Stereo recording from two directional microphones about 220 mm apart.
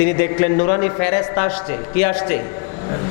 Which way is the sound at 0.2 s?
15° left (ahead or behind).